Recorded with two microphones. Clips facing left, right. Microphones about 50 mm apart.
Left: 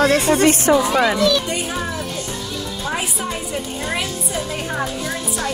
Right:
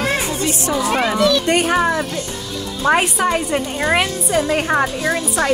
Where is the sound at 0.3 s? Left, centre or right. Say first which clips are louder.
Left 7 dB; left.